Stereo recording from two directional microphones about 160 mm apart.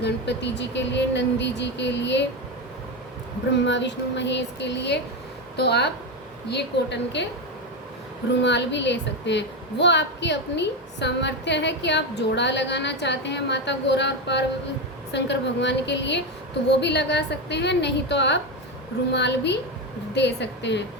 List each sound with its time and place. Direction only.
0.0 s a woman's voice: 90° left
3.7 s a woman's voice: 90° left
8.4 s a woman's voice: 90° left